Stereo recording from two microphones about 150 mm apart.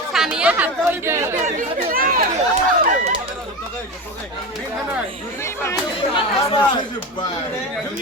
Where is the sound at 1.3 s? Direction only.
60° right (ahead or behind).